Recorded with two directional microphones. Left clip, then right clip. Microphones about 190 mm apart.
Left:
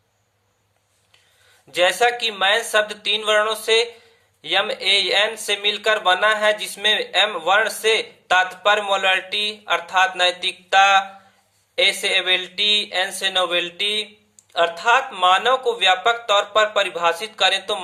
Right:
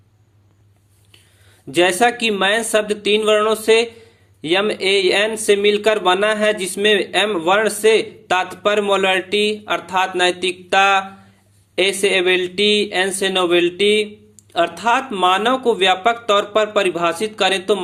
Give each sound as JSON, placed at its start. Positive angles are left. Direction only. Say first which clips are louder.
{"t": 1.7, "sound": "speech", "louder": "right 2 dB", "side_deg": -25}